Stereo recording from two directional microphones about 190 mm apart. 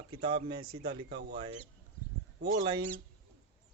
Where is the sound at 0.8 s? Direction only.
60° right (ahead or behind).